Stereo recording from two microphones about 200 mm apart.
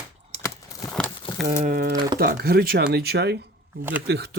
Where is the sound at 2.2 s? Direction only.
50° right (ahead or behind).